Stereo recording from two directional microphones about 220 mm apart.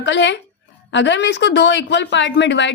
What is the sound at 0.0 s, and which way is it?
A woman's voice, 55° left (ahead or behind).